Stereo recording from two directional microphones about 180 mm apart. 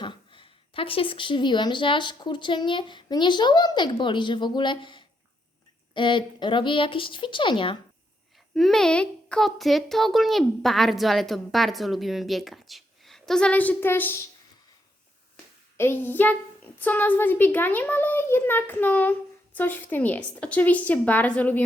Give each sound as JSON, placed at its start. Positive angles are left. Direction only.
{"t": 0.0, "sound": "a woman's voice", "side_deg": 25}
{"t": 8.5, "sound": "speech", "side_deg": 0}
{"t": 15.8, "sound": "a child's voice", "side_deg": 10}